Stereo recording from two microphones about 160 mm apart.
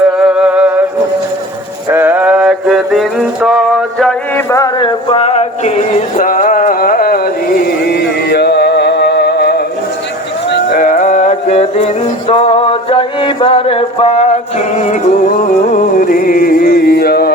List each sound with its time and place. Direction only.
0.2 s music: 5° right (ahead or behind)
1.9 s male singing: 10° right (ahead or behind)
4.4 s music: 20° left (ahead or behind); by 9.6 s 90° left
10.5 s music: 65° left (ahead or behind); by 15.1 s 45° left (ahead or behind)
15.7 s music: 60° left (ahead or behind); by 17.3 s 75° left (ahead or behind)